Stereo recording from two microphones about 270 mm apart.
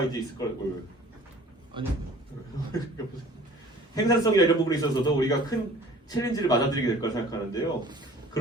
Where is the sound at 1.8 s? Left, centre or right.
Centre.